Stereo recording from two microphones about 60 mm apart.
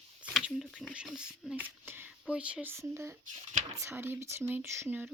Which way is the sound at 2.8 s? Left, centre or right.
Right.